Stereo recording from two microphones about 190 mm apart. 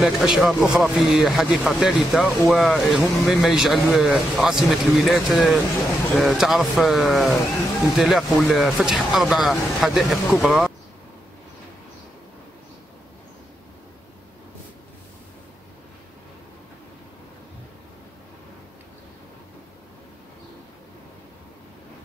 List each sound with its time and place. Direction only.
0.0 s speech: centre (ahead or behind)